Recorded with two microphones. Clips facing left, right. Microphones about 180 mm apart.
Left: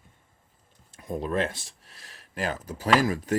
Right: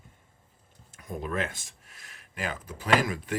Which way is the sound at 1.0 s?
30° left (ahead or behind).